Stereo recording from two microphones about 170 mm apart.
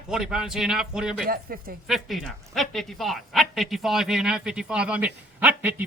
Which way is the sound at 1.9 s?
Centre (ahead or behind).